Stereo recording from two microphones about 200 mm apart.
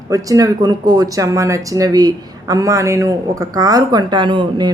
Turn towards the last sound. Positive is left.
turn(degrees=-25)  # may be behind; listen again after turning